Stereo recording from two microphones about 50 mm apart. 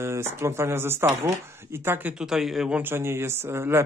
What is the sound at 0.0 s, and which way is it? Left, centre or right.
Speech, right.